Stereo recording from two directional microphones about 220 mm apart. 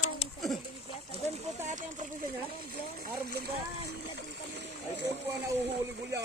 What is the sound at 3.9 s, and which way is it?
Splash, 50° right (ahead or behind).